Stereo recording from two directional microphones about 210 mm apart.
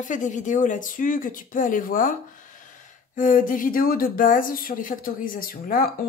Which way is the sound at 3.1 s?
40° left (ahead or behind).